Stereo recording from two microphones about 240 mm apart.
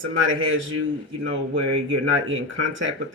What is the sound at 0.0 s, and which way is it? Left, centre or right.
Speech, right.